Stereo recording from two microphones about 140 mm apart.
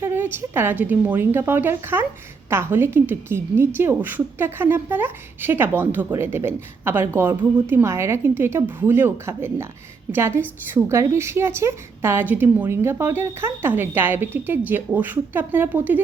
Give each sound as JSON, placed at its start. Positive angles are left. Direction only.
{"t": 0.0, "sound": "a woman's voice", "side_deg": -15}